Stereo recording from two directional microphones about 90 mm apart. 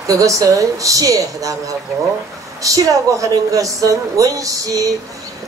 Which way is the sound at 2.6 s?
40° right (ahead or behind).